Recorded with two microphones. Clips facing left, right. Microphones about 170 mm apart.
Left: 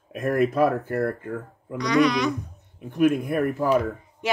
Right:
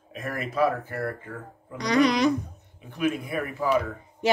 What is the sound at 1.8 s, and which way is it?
Speech, 35° right (ahead or behind).